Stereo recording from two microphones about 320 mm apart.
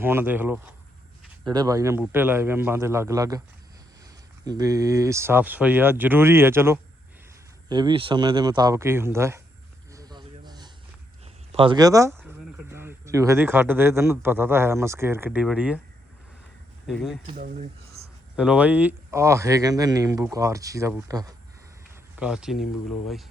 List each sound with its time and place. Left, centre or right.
0.0 s speech: centre
4.4 s speech: centre
9.9 s a sound: centre
11.5 s speech: centre
16.8 s speech: centre
17.3 s speech: right
18.0 s a sound: centre
18.3 s speech: centre